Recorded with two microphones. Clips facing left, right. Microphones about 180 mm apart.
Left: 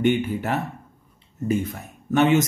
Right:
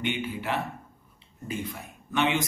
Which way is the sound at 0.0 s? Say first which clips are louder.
Left 9 dB; 45° left (ahead or behind).